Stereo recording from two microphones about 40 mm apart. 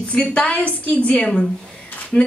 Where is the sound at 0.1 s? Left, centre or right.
Left.